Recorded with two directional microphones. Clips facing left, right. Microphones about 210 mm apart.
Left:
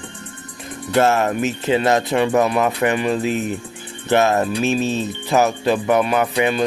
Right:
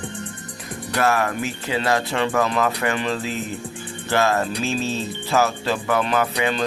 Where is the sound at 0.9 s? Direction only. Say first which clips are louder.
Left 5 dB; 25° left (ahead or behind).